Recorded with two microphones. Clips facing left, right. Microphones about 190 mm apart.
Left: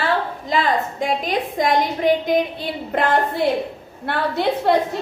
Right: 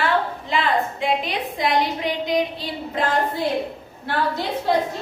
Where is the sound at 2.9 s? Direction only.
60° left (ahead or behind).